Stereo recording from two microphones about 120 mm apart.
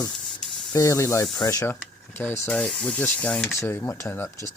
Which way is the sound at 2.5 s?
10° left (ahead or behind).